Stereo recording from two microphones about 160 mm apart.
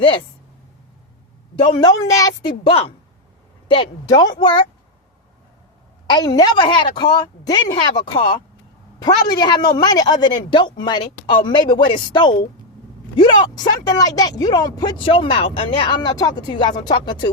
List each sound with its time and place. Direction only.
1.7 s speech: 25° left (ahead or behind)
6.1 s speech: 25° left (ahead or behind)
13.4 s speech: 25° left (ahead or behind)